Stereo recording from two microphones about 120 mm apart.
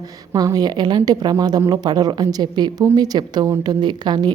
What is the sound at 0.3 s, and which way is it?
A woman's voice, 30° right (ahead or behind).